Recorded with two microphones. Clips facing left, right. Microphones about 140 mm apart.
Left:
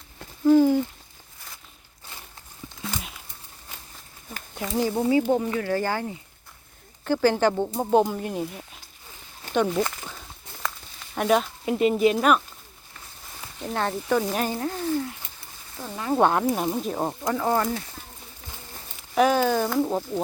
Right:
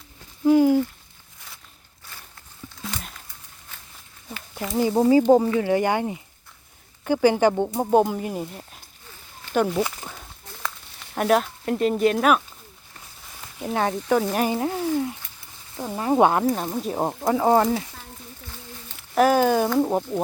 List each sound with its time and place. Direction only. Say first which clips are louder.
0.4 s speech: right 1 dB; 10° right (ahead or behind)
2.8 s a sound: left 1 dB; 5° left (ahead or behind)
4.5 s speech: right 2 dB; centre (ahead or behind)
5.0 s speech: right 7 dB; 40° right (ahead or behind)
5.5 s speech: right 5 dB; 15° right (ahead or behind)
11.2 s speech: right 1 dB; centre (ahead or behind)
13.6 s speech: right 3 dB; 5° right (ahead or behind)
14.5 s frying: right 3 dB; 20° right (ahead or behind)
16.0 s speech: right 3 dB; 20° right (ahead or behind)
16.3 s speech: right 1 dB; centre (ahead or behind)
17.2 s speech: right 6 dB; 25° right (ahead or behind)
19.1 s speech: right 2 dB; 5° right (ahead or behind)